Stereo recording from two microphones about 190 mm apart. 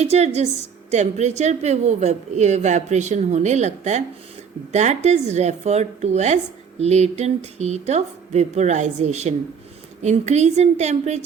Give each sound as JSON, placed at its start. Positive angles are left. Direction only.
{"t": 0.0, "sound": "a woman's voice", "side_deg": -35}